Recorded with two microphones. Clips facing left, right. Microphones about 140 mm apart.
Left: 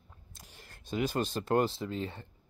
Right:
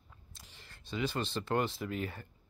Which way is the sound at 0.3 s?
45° left (ahead or behind).